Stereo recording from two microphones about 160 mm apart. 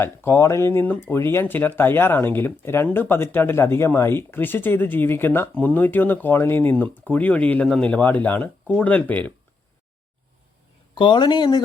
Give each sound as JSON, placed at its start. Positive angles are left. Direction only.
{"t": 0.0, "sound": "speech", "side_deg": 15}
{"t": 10.9, "sound": "speech", "side_deg": 30}